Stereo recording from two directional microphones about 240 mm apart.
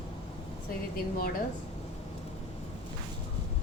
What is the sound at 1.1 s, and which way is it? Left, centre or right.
Speech, left.